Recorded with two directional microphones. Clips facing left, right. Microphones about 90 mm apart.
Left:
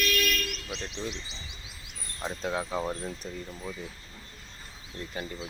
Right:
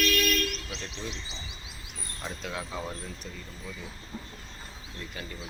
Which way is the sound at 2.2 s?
35° left (ahead or behind).